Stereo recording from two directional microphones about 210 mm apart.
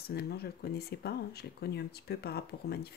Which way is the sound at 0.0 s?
50° left (ahead or behind).